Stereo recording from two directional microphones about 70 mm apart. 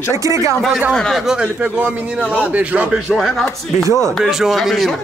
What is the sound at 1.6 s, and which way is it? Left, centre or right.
A man's voice, centre.